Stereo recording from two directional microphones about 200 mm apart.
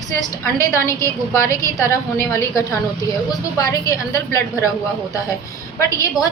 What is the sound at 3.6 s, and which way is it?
A woman's voice, 15° left (ahead or behind).